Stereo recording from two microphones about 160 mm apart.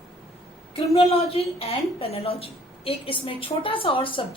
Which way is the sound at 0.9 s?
40° left (ahead or behind).